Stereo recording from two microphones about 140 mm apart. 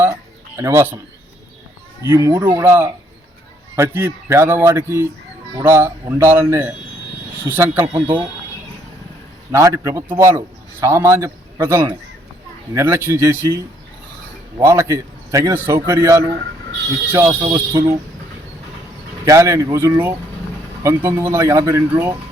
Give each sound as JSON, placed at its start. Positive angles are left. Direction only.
{"t": 0.5, "sound": "a man's voice", "side_deg": -20}
{"t": 2.0, "sound": "a man's voice", "side_deg": -25}
{"t": 9.5, "sound": "a man's voice", "side_deg": -20}
{"t": 19.2, "sound": "a man's voice", "side_deg": -20}